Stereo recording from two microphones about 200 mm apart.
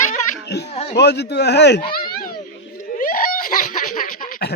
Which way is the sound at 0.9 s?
55° left (ahead or behind).